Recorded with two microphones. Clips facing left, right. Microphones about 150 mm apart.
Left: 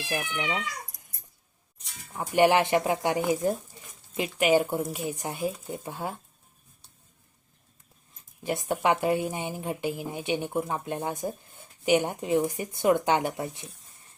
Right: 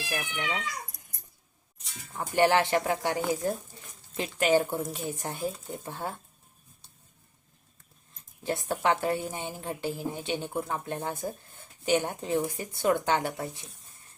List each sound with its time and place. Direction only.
0.2 s speech: 10° left (ahead or behind)
2.1 s speech: 15° left (ahead or behind)
8.4 s speech: 15° left (ahead or behind)